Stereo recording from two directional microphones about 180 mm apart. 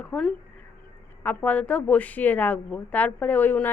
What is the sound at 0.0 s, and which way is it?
A woman's voice, 5° left (ahead or behind).